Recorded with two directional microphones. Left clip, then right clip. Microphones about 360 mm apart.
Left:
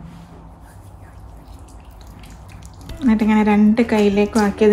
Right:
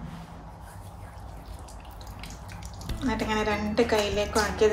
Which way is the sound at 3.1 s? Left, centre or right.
Centre.